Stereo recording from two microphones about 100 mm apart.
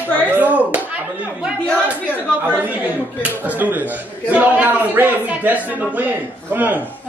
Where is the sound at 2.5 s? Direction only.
15° right (ahead or behind).